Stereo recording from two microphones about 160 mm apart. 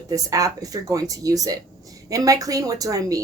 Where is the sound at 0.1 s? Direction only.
20° right (ahead or behind).